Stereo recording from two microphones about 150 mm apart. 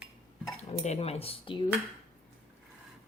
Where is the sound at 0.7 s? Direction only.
45° left (ahead or behind).